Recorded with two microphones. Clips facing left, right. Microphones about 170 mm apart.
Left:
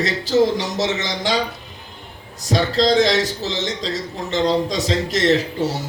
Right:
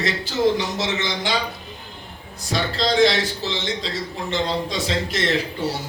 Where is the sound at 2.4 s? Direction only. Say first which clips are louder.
Left 6 dB; 40° left (ahead or behind).